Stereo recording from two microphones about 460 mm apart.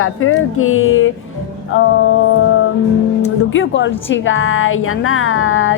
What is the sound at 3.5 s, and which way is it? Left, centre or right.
A woman's voice, left.